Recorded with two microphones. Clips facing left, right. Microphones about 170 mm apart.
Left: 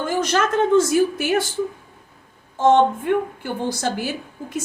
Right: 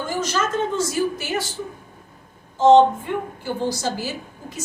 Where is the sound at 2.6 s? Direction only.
55° left (ahead or behind).